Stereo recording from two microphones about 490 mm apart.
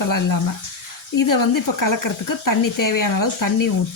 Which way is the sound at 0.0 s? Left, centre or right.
Left.